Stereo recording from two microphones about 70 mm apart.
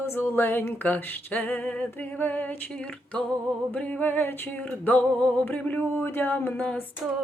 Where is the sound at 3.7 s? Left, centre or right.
Left.